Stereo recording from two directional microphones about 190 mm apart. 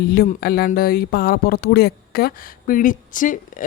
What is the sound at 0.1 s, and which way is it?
Speech, 55° left (ahead or behind).